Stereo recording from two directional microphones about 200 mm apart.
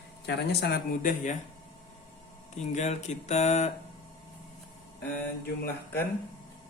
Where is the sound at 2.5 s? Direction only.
35° left (ahead or behind).